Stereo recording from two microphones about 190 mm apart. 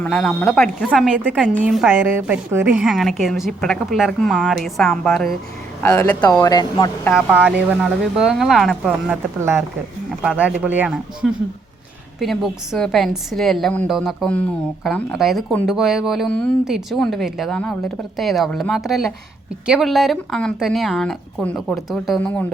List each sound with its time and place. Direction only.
0.0 s a woman's voice: 5° left (ahead or behind); by 2.8 s 10° right (ahead or behind)
2.8 s speech: centre (ahead or behind)
6.4 s speech: 20° left (ahead or behind)
7.0 s speech: centre (ahead or behind)
10.2 s speech: 5° right (ahead or behind)